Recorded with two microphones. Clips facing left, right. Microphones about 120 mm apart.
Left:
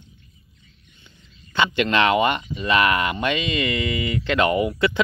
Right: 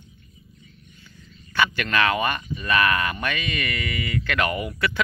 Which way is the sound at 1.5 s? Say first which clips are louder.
Left 3 dB; 20° left (ahead or behind).